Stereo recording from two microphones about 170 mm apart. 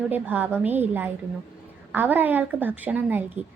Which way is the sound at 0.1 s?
10° right (ahead or behind).